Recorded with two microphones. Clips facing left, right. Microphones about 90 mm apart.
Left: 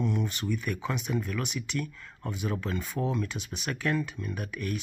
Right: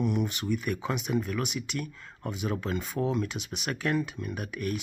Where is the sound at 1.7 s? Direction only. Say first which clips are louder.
Left 1 dB; 30° right (ahead or behind).